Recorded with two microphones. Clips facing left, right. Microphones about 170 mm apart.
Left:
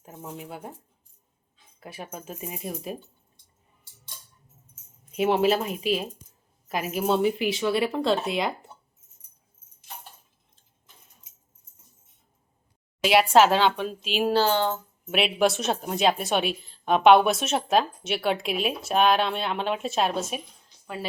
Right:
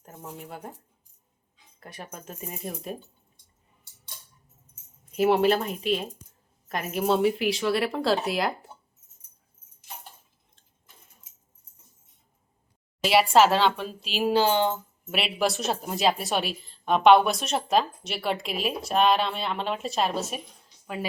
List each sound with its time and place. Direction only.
0.0 s speech: 5° left (ahead or behind)
1.8 s a woman's voice: 5° left (ahead or behind)
5.1 s a woman's voice: centre (ahead or behind)
13.1 s a woman's voice: centre (ahead or behind)
14.3 s speech: 15° right (ahead or behind)
15.1 s a woman's voice: centre (ahead or behind)
20.8 s speech: 15° right (ahead or behind)